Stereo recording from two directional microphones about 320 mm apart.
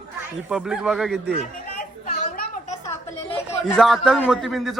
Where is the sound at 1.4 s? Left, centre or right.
Left.